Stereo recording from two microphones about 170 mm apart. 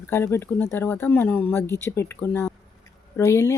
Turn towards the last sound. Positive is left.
turn(degrees=15)  # may be behind; listen again after turning